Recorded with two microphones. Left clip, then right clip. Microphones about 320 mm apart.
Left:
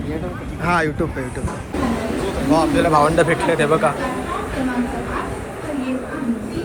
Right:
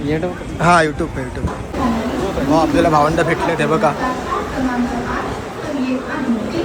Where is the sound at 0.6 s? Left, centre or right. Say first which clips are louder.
Right 6 dB; centre.